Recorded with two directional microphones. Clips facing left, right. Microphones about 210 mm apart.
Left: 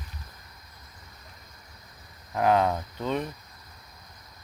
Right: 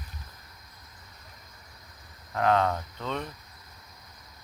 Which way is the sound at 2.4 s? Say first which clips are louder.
Left 2 dB; 10° left (ahead or behind).